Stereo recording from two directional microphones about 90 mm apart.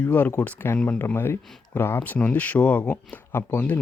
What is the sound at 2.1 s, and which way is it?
Speech, 15° left (ahead or behind).